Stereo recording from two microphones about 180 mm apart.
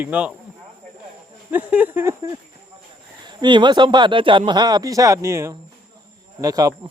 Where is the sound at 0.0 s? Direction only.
10° right (ahead or behind).